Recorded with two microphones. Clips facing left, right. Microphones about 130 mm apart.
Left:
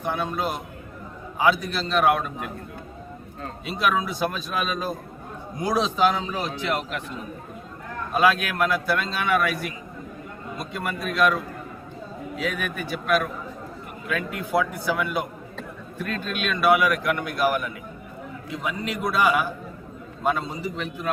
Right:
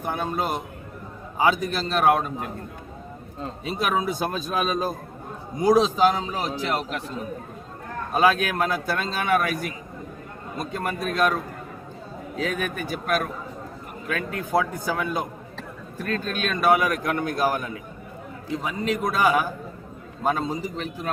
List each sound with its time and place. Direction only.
0.0 s a man's voice: 45° right (ahead or behind)
3.7 s a man's voice: 40° right (ahead or behind)
8.1 s a man's voice: 40° right (ahead or behind)
12.4 s a man's voice: 40° right (ahead or behind)